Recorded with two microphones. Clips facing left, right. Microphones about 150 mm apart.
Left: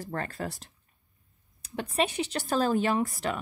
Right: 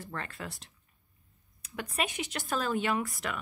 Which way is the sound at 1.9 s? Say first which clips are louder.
Left 6 dB; 30° left (ahead or behind).